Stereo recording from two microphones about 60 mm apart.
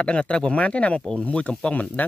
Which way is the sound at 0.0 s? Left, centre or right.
Centre.